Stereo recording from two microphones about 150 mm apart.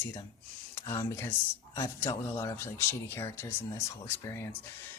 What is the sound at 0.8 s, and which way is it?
Speech, 20° left (ahead or behind).